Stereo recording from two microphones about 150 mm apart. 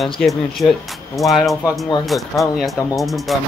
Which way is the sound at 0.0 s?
Centre (ahead or behind).